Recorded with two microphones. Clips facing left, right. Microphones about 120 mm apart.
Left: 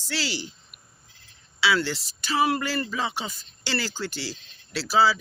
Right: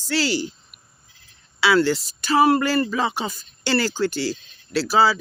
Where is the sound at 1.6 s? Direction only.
50° right (ahead or behind).